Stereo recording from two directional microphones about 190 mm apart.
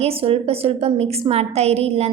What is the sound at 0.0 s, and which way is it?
A woman's voice, 30° right (ahead or behind).